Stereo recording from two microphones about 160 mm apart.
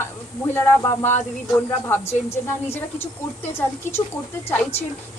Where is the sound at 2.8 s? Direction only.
15° left (ahead or behind).